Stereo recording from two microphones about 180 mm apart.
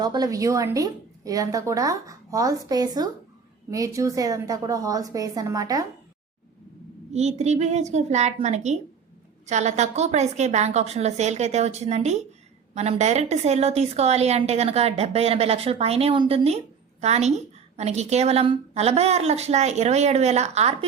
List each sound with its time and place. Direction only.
0.0 s a woman's voice: 20° right (ahead or behind)
7.1 s a woman's voice: 40° right (ahead or behind)